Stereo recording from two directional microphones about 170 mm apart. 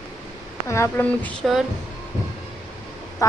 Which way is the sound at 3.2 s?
20° left (ahead or behind).